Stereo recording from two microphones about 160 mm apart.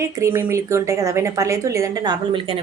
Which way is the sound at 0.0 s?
20° right (ahead or behind).